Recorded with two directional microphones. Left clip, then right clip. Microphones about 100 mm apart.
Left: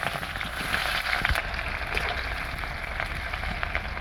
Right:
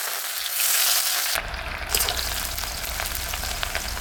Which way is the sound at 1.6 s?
45° right (ahead or behind).